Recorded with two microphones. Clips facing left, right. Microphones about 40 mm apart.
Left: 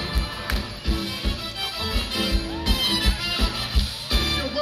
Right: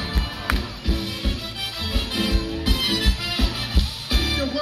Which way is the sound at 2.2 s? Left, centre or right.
Centre.